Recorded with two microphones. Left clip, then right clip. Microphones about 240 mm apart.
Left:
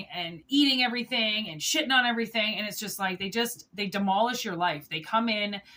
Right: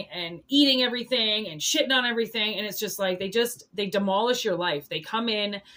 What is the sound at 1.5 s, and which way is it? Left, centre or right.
Speech, centre.